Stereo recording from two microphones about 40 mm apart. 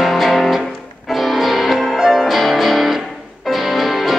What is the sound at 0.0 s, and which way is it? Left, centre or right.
Music, centre.